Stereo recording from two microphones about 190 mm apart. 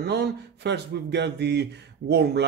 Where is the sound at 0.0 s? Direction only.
60° right (ahead or behind).